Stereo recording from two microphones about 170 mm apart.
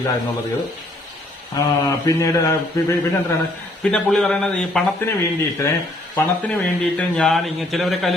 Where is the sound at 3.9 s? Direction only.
5° left (ahead or behind).